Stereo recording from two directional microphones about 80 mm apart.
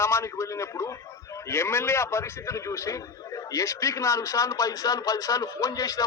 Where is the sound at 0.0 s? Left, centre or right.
Left.